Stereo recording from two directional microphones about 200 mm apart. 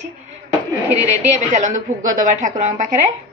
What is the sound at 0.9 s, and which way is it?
A woman's voice, 35° right (ahead or behind).